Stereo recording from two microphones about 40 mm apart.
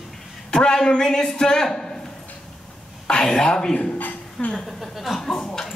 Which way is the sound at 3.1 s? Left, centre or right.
Centre.